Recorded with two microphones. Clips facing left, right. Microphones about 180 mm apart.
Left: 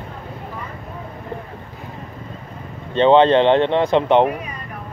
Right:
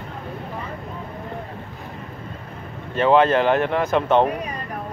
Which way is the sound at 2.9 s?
25° left (ahead or behind).